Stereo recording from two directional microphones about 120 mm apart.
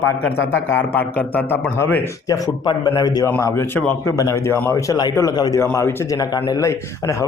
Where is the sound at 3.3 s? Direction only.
20° left (ahead or behind).